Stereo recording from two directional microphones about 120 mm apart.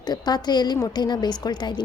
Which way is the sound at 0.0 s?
35° left (ahead or behind).